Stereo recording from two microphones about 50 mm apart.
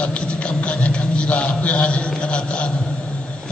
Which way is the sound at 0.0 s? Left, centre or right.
Centre.